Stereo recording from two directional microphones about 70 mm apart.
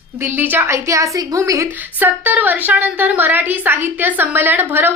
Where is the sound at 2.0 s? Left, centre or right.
Right.